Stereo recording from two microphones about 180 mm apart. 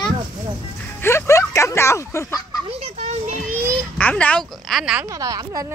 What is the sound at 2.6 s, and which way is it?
Children playing, 35° right (ahead or behind).